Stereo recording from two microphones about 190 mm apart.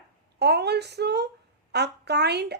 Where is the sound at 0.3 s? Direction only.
60° right (ahead or behind).